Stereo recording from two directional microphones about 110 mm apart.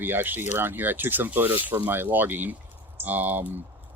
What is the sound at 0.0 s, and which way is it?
Speech, 15° right (ahead or behind).